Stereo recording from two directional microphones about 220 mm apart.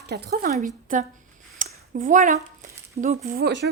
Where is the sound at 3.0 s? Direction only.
35° right (ahead or behind).